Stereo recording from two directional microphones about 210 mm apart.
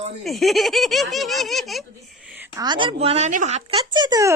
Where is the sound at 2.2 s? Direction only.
5° right (ahead or behind).